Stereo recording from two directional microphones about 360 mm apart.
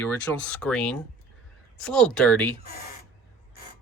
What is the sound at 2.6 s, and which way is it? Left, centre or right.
Speech, left.